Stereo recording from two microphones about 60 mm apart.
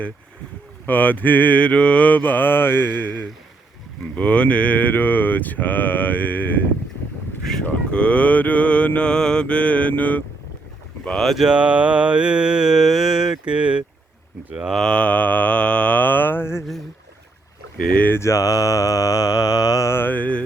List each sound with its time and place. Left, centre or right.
0.9 s mantra: left
7.6 s mantra: left
11.0 s speech: centre
11.3 s mantra: centre
14.8 s mantra: left
18.1 s mantra: left
19.9 s mantra: left